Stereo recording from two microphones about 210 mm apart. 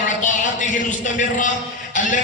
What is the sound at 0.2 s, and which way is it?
A man's voice, 35° left (ahead or behind).